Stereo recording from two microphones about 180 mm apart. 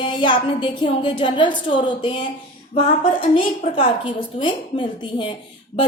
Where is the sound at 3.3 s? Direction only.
25° left (ahead or behind).